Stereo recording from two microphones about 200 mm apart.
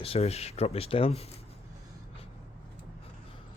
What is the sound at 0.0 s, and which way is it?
Speech, 30° left (ahead or behind).